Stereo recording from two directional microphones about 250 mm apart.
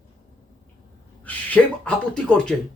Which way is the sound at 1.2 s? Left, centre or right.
Centre.